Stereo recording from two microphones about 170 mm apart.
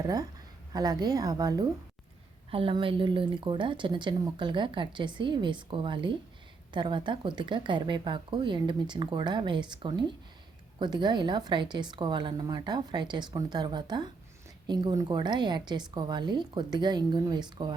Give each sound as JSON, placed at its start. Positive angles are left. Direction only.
{"t": 0.7, "sound": "a woman's voice", "side_deg": -25}